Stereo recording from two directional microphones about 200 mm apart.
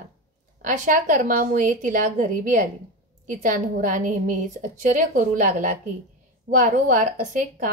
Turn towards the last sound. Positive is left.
turn(degrees=-40)  # may be behind; listen again after turning